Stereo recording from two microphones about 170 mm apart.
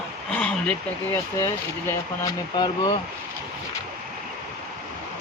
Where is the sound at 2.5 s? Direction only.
25° left (ahead or behind).